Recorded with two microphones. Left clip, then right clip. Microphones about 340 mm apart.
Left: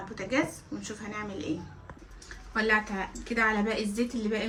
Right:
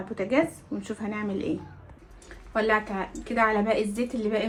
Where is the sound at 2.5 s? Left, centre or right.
Centre.